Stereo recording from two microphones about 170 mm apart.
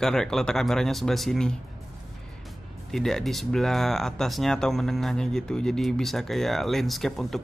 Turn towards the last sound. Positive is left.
turn(degrees=0)  # may be behind; listen again after turning